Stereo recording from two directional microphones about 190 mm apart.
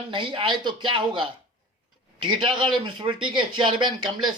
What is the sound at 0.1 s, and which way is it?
Speech, 25° right (ahead or behind).